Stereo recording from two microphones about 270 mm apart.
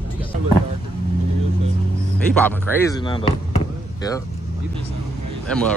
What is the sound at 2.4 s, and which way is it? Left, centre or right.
Speech, centre.